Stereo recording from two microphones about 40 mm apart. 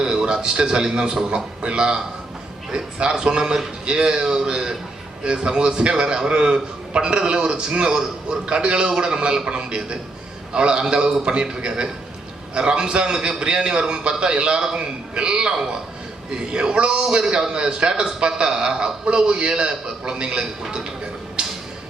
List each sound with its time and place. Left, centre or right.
0.0 s a man's voice: centre